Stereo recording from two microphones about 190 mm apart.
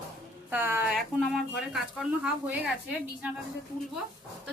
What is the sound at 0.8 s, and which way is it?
A woman's voice, centre (ahead or behind).